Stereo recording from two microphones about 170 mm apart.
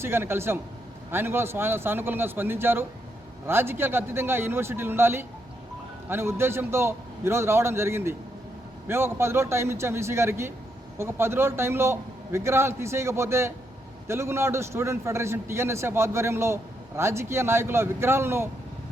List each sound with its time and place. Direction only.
0.0 s a man's voice: 15° right (ahead or behind)